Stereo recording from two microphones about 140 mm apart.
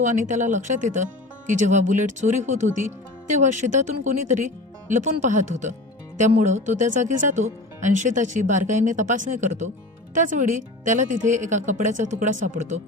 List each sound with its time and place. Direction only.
0.0 s speech: 60° right (ahead or behind)
10.8 s speech: 65° right (ahead or behind)